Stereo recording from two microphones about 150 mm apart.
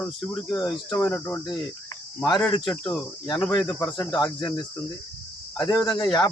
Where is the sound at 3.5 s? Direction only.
20° left (ahead or behind).